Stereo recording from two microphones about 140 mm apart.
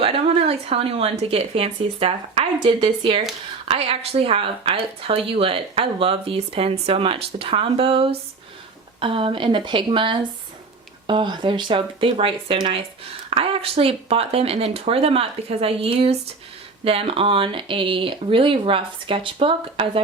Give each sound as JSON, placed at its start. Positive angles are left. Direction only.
{"t": 0.0, "sound": "speech", "side_deg": -45}